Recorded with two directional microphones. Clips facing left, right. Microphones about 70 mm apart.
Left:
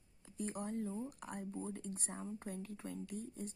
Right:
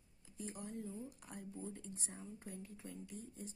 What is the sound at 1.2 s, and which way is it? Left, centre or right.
A woman's voice, left.